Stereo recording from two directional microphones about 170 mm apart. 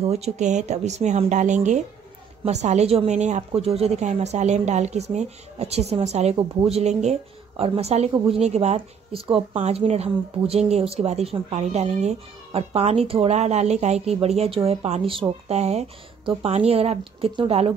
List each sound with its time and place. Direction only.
0.0 s speech: 40° right (ahead or behind)